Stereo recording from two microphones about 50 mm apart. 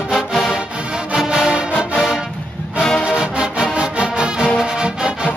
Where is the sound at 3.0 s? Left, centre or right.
Centre.